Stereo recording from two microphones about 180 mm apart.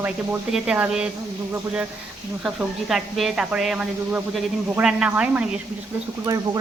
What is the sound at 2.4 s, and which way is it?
Speech, centre (ahead or behind).